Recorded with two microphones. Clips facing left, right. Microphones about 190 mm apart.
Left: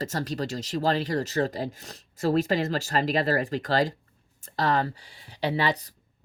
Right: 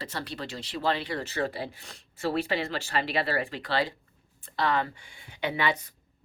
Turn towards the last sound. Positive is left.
turn(degrees=35)  # may be behind; listen again after turning